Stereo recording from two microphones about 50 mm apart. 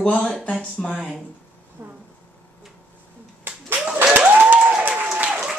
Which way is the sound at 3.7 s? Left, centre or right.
Right.